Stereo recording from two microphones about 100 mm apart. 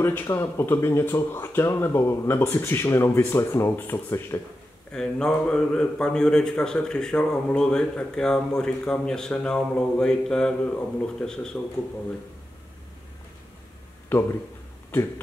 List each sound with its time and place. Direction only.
0.0 s speech: 20° left (ahead or behind)
4.9 s a man's voice: 10° left (ahead or behind)
14.1 s speech: 20° left (ahead or behind)